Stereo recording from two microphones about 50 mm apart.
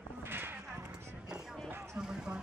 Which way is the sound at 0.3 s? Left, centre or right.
Right.